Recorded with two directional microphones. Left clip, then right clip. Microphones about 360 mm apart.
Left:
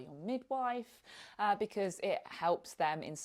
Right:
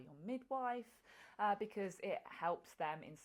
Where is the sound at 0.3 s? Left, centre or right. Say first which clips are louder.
Left 6 dB; left.